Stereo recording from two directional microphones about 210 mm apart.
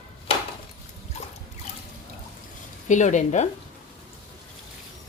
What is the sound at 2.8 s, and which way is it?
Speech, 35° left (ahead or behind).